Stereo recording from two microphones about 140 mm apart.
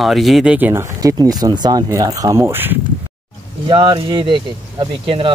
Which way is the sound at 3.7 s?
35° right (ahead or behind).